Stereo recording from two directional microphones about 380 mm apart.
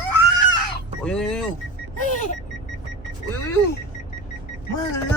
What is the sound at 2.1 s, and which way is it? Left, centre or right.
Alarm clock, centre.